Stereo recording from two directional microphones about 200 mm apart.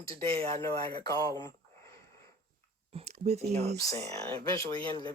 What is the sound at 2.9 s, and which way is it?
Speech, 35° right (ahead or behind).